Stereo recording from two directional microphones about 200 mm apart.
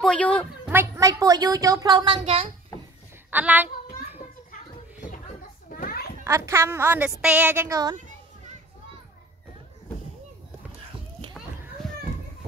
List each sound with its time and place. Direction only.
0.0 s speech: 5° left (ahead or behind)
0.7 s a woman's voice: 15° right (ahead or behind); by 2.5 s 30° right (ahead or behind)
3.3 s speech: 10° right (ahead or behind)
5.7 s children playing: 45° left (ahead or behind)
6.2 s a woman's voice: 15° right (ahead or behind)
11.8 s children playing: 5° left (ahead or behind)